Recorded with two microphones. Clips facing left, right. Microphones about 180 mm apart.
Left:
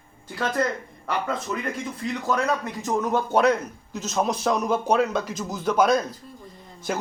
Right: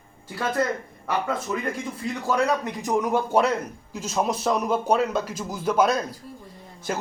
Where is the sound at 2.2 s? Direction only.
10° right (ahead or behind).